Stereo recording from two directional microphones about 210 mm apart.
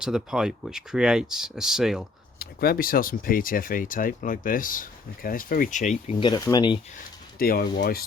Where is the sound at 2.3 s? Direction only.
45° left (ahead or behind); by 6.8 s 20° left (ahead or behind).